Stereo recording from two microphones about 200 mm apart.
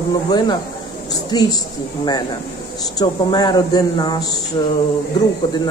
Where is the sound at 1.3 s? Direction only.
20° left (ahead or behind).